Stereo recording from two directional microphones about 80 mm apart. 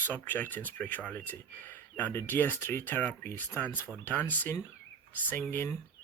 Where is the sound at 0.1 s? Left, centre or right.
Left.